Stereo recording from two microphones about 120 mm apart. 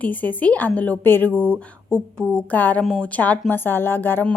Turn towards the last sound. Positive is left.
turn(degrees=15)  # may be behind; listen again after turning